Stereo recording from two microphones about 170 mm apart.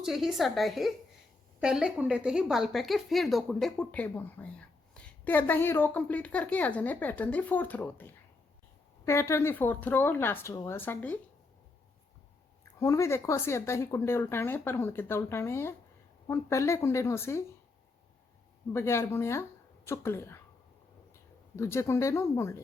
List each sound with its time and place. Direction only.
0.0 s a woman's voice: centre (ahead or behind)
10.5 s a woman's voice: 25° left (ahead or behind)
10.8 s speech: 10° left (ahead or behind)
12.8 s speech: 15° left (ahead or behind)
18.7 s speech: 15° left (ahead or behind)
21.5 s speech: 15° left (ahead or behind)